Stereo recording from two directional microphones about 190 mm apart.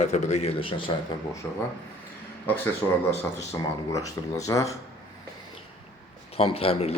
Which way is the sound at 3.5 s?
15° left (ahead or behind).